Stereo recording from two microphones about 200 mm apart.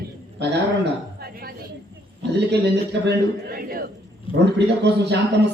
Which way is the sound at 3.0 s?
50° right (ahead or behind).